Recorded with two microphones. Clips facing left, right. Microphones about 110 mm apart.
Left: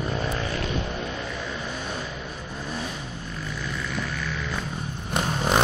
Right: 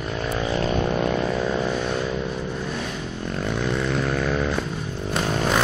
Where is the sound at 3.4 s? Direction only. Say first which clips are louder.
Right 9 dB; 65° right (ahead or behind).